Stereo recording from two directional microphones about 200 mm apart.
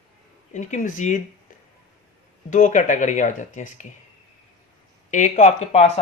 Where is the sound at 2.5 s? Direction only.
40° left (ahead or behind).